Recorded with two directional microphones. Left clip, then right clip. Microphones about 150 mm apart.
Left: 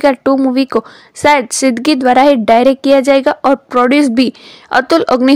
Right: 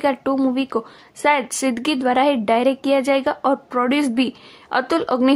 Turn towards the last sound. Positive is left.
turn(degrees=40)  # may be behind; listen again after turning